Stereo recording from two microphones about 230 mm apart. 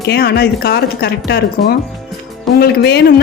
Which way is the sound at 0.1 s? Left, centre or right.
Left.